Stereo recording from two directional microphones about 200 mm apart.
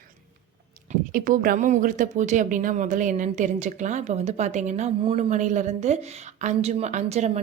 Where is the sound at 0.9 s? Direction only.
45° right (ahead or behind).